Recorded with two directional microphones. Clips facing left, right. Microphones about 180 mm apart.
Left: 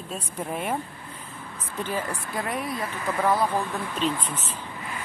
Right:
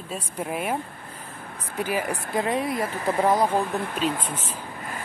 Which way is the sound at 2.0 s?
60° right (ahead or behind).